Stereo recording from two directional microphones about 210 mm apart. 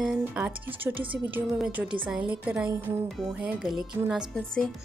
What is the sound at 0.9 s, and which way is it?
Speech, 25° right (ahead or behind).